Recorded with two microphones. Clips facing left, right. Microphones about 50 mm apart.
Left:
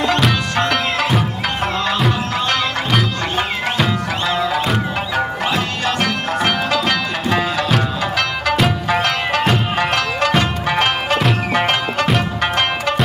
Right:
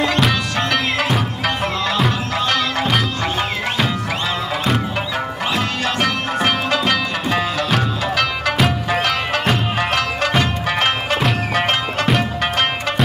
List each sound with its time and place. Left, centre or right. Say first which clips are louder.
0.1 s music: left 1 dB; centre
4.6 s music: even; centre